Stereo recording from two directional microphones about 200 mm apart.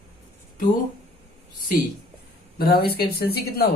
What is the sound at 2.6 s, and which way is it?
Speech, 50° left (ahead or behind).